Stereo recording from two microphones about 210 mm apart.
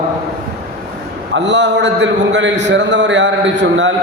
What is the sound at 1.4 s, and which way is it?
A man's voice, 55° right (ahead or behind).